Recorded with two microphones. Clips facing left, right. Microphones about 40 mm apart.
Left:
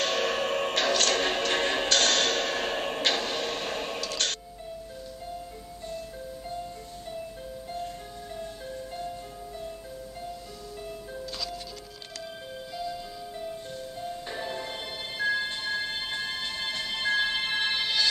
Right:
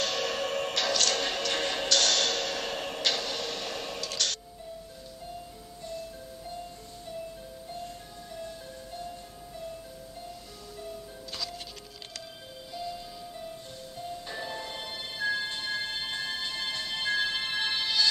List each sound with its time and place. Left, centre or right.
0.0 s music: left
14.0 s music: centre